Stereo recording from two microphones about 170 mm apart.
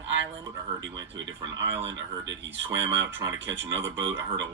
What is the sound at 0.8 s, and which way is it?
Speech, 90° right.